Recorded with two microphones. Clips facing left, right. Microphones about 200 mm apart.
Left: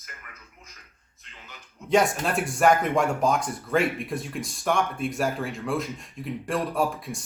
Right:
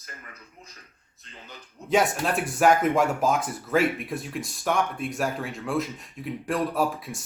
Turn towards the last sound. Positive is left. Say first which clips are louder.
# even
turn(degrees=0)  # may be behind; listen again after turning